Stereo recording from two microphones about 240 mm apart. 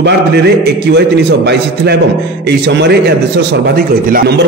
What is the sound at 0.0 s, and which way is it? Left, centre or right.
A man's voice, right.